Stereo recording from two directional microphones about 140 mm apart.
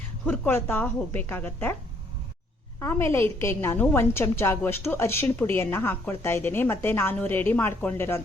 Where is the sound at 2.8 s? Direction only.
20° left (ahead or behind).